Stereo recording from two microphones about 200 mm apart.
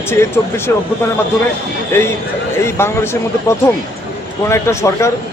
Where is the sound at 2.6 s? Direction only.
10° left (ahead or behind).